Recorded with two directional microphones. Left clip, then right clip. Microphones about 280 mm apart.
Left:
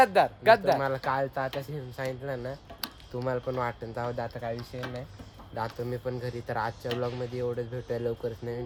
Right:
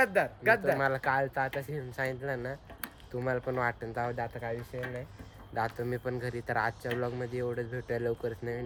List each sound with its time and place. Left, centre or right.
0.0 s speech: centre